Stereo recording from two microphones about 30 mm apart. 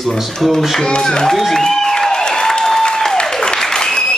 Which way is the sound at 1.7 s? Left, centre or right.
Centre.